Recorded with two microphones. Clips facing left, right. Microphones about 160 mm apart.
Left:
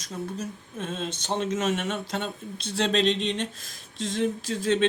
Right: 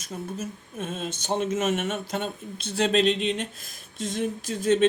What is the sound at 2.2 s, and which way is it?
Speech, 50° right (ahead or behind).